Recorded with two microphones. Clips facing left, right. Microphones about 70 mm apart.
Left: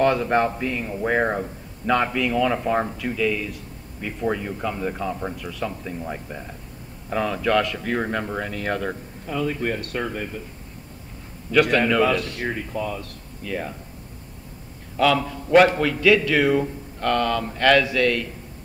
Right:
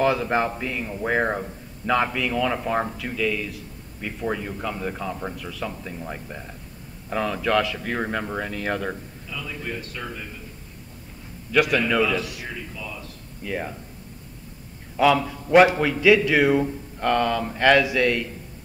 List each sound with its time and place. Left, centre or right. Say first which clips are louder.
0.0 s a man's voice: left 2 dB; centre
9.3 s speech: left 8 dB; left
12.4 s speech: left 8 dB; left
13.4 s speech: even; centre
15.0 s a man's voice: right 1 dB; centre